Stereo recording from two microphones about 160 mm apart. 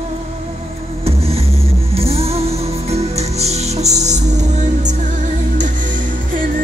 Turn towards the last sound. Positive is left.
turn(degrees=-55)  # may be behind; listen again after turning